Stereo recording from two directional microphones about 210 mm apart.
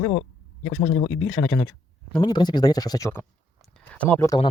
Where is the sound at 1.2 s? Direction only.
10° left (ahead or behind).